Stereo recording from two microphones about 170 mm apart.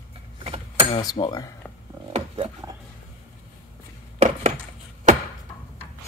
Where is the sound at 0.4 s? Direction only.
35° right (ahead or behind).